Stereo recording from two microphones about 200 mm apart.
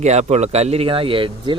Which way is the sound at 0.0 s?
35° right (ahead or behind).